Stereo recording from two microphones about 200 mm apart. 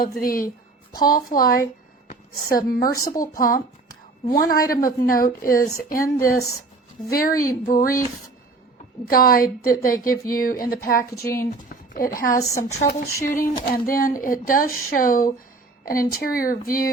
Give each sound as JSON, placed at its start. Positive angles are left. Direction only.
{"t": 0.0, "sound": "a woman's voice", "side_deg": 45}
{"t": 7.1, "sound": "a woman's voice", "side_deg": 50}
{"t": 9.0, "sound": "a woman's voice", "side_deg": 45}
{"t": 12.3, "sound": "a woman's voice", "side_deg": 15}
{"t": 12.9, "sound": "a woman's voice", "side_deg": 45}